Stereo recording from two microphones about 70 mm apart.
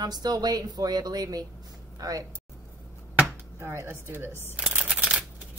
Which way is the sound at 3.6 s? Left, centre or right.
Right.